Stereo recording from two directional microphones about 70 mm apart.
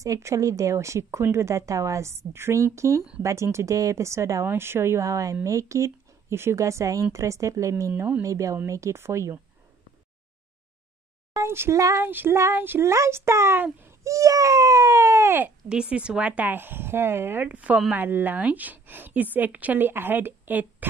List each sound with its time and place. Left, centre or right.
0.0 s speech: right
11.4 s a child's voice: right
12.4 s speech: right
12.6 s a child's voice: right
12.9 s a child's voice: right
13.6 s speech: right
14.0 s speech: right
15.7 s speech: centre; by 17.5 s right
17.5 s speech: centre
17.9 s speech: right